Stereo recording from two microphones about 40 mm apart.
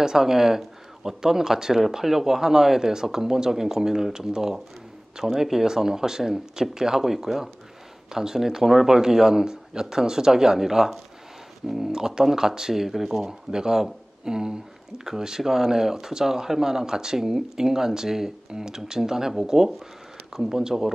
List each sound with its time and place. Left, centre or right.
0.0 s speech: centre